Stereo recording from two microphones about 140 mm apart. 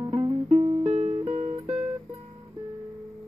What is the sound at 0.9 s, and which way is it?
Music, 45° right (ahead or behind).